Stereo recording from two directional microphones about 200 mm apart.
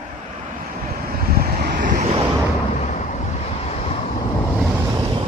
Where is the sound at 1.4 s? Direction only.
40° right (ahead or behind).